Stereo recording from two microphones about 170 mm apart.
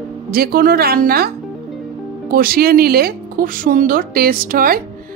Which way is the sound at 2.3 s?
60° right (ahead or behind).